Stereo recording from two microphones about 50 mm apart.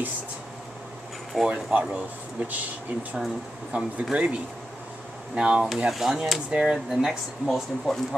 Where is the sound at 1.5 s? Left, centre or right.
Right.